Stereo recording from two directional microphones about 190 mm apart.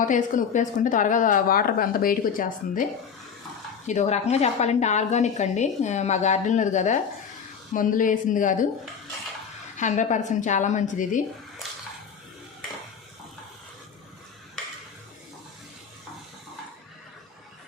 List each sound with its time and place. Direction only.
0.0 s a woman's voice: 40° left (ahead or behind)
3.8 s a woman's voice: 35° left (ahead or behind)
9.7 s a woman's voice: 40° left (ahead or behind)